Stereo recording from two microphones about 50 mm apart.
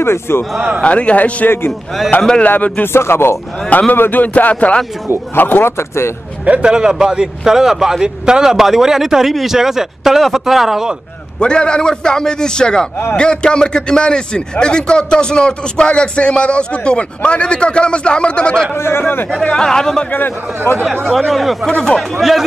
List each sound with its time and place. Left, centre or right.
0.0 s speech: left
0.8 s a man's voice: left
2.8 s speech: left
3.9 s speech: left
5.3 s a man's voice: left
5.7 s speech: left
6.4 s a man's voice: right; by 11.0 s centre
11.3 s a man's voice: centre
18.8 s speech: left
19.5 s a man's voice: centre
20.1 s speech: left
21.3 s a man's voice: centre
21.6 s a man's voice: centre
22.2 s a man's voice: centre